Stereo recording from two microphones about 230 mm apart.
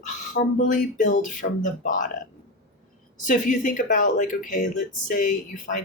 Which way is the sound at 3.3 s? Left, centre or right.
Left.